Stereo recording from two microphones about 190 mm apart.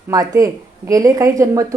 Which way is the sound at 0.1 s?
20° right (ahead or behind).